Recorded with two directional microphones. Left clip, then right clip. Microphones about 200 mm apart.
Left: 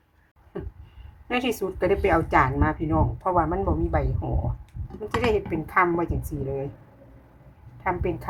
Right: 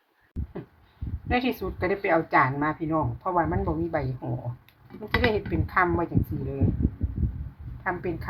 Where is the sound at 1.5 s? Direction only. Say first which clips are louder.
Left 4 dB; 20° left (ahead or behind).